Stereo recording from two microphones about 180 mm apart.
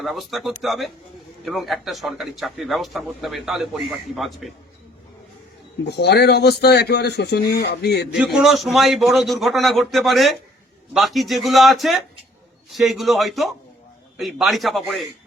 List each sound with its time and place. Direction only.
0.0 s a man's voice: centre (ahead or behind)
5.8 s a man's voice: 65° left (ahead or behind)
8.1 s a man's voice: 5° right (ahead or behind)